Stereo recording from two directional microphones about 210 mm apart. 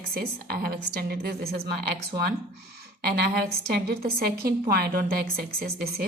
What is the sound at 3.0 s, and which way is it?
A woman's voice, 45° right (ahead or behind).